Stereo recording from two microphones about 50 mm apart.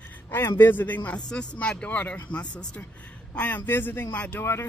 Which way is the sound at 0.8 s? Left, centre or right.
Left.